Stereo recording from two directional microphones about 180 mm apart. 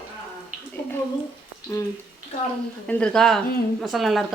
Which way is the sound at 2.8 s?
5° left (ahead or behind).